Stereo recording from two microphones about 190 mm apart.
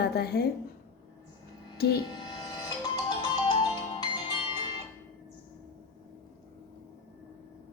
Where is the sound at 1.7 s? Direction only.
55° left (ahead or behind).